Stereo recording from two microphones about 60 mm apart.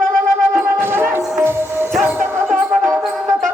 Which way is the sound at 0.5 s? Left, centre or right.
Right.